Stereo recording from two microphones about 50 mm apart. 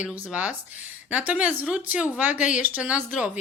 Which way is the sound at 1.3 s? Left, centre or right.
Right.